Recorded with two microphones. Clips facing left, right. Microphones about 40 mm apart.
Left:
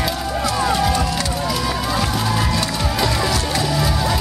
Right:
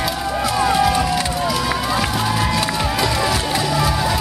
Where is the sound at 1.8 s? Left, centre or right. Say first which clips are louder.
Right 1 dB; centre.